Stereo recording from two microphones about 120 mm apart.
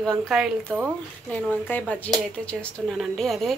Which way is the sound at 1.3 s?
10° left (ahead or behind).